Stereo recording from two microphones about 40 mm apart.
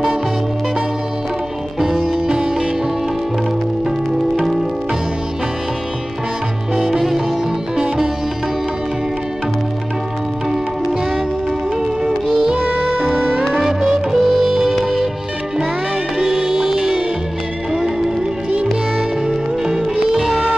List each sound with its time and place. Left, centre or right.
1.8 s music: centre
2.3 s music: right
6.7 s music: centre
12.0 s music: centre
13.0 s music: centre
13.6 s music: centre
16.2 s music: centre
19.2 s music: centre
20.2 s music: centre